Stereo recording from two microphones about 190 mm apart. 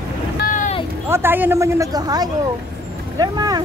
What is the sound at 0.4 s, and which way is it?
Vehicle, 45° left (ahead or behind).